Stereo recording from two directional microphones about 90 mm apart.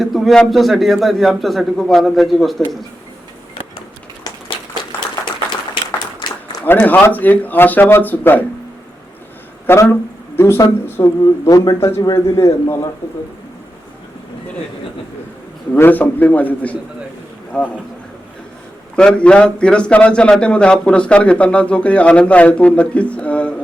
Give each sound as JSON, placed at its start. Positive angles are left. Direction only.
{"t": 0.0, "sound": "a man's voice", "side_deg": 0}
{"t": 4.2, "sound": "a sound", "side_deg": 50}
{"t": 6.7, "sound": "speech", "side_deg": 20}
{"t": 9.6, "sound": "speech", "side_deg": 25}
{"t": 11.2, "sound": "a man's voice", "side_deg": 45}
{"t": 15.7, "sound": "a man's voice", "side_deg": 20}
{"t": 18.9, "sound": "a man's voice", "side_deg": 10}